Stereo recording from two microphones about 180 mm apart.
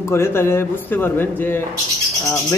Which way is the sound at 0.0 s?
15° left (ahead or behind).